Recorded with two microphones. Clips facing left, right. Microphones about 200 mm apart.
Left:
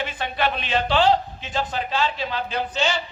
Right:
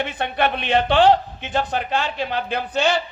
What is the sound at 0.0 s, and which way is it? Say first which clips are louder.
A man's voice: right 3 dB; 55° right (ahead or behind).